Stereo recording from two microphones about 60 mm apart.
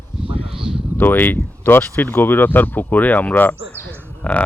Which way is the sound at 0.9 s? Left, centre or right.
Left.